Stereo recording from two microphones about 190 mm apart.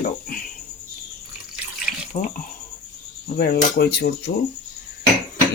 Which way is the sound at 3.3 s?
55° left (ahead or behind).